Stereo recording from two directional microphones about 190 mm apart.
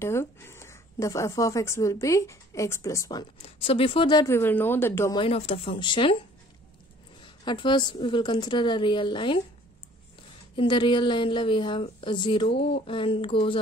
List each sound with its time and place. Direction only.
0.0 s speech: 15° left (ahead or behind)
3.4 s speech: 30° left (ahead or behind); by 5.1 s 10° left (ahead or behind)
5.1 s a woman's voice: 30° left (ahead or behind)
7.4 s a woman's voice: 25° left (ahead or behind)
10.5 s a woman's voice: 25° left (ahead or behind)